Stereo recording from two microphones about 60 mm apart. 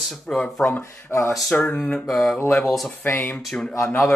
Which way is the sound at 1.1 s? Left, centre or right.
Left.